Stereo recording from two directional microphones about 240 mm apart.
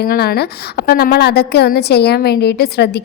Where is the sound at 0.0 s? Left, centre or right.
Left.